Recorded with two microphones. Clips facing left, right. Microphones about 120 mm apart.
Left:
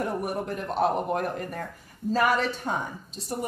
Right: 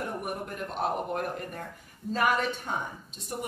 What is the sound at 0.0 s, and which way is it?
Speech, 40° left (ahead or behind).